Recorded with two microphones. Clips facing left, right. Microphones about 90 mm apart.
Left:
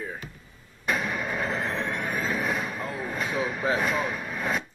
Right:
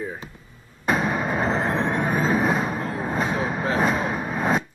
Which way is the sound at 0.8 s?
35° right (ahead or behind).